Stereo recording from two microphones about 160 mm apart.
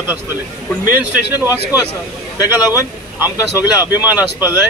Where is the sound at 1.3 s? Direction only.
10° right (ahead or behind).